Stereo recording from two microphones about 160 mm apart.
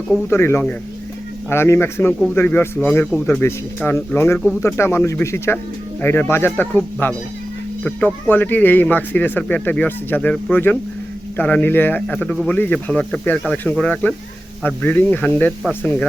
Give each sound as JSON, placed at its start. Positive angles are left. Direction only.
{"t": 0.3, "sound": "speech", "side_deg": 15}